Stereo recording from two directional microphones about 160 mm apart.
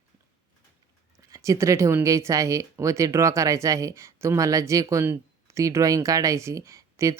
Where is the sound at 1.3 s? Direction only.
20° right (ahead or behind).